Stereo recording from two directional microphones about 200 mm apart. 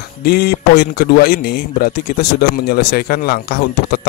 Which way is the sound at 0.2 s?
50° left (ahead or behind).